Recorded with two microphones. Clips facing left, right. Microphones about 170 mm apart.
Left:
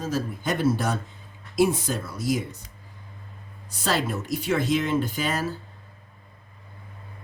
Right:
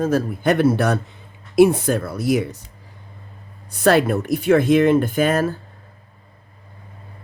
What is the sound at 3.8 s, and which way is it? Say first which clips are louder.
Speech: right 10 dB; 60° right (ahead or behind).